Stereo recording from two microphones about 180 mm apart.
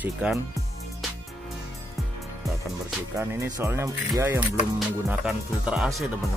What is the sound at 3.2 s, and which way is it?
Speech, 15° right (ahead or behind).